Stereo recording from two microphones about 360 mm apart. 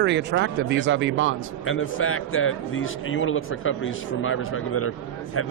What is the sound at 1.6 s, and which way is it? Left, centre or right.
Speech, left.